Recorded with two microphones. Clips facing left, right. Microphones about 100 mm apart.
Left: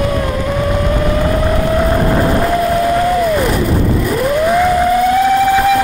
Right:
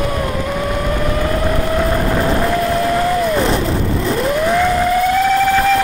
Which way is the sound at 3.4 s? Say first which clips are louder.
Left 2 dB; 25° right (ahead or behind).